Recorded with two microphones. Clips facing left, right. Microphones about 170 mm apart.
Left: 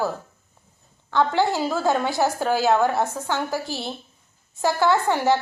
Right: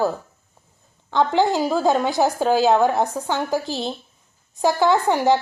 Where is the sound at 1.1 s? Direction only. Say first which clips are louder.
Right 2 dB; 20° right (ahead or behind).